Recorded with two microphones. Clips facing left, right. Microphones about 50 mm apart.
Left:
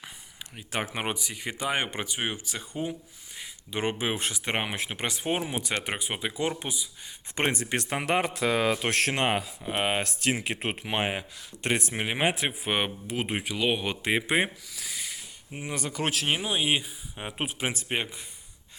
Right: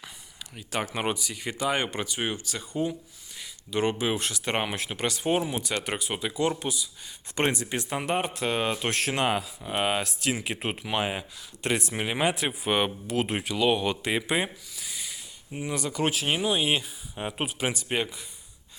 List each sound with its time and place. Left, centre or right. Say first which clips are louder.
0.5 s speech: right 1 dB; centre
7.5 s speech: left 2 dB; left
7.8 s a man's voice: left 3 dB; left
9.1 s speech: right 1 dB; left
14.8 s a sound: left 1 dB; left
15.5 s speech: right 3 dB; left
16.3 s speech: right 1 dB; centre
17.4 s speech: even; left